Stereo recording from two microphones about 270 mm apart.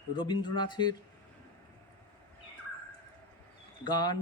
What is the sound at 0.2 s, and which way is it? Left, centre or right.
Speech, centre.